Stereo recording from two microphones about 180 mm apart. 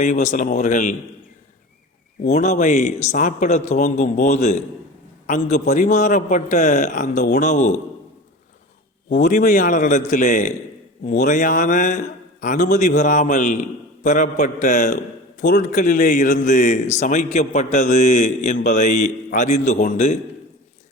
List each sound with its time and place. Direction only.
0.0 s a man's voice: 40° left (ahead or behind)
2.3 s a man's voice: 40° left (ahead or behind)
9.0 s a man's voice: 45° left (ahead or behind)